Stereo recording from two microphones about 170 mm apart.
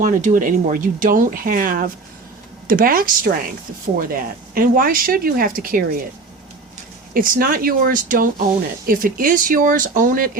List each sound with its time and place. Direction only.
0.0 s speech: 50° right (ahead or behind)
7.1 s speech: 60° right (ahead or behind)